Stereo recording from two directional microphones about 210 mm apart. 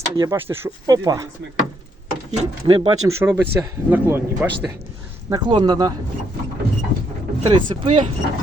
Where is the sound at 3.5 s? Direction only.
10° right (ahead or behind).